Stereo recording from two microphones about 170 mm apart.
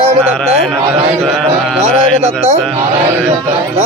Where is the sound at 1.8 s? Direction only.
40° right (ahead or behind).